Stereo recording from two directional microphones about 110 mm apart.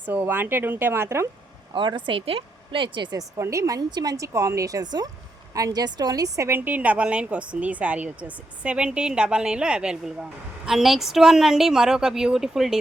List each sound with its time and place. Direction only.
0.0 s speech: 15° right (ahead or behind)
1.7 s a woman's voice: 45° right (ahead or behind); by 12.8 s 5° right (ahead or behind)